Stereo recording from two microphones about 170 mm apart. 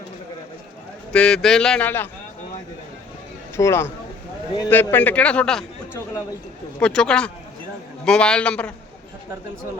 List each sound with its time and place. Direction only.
1.1 s speech: 5° left (ahead or behind)
3.6 s a man's voice: 15° left (ahead or behind)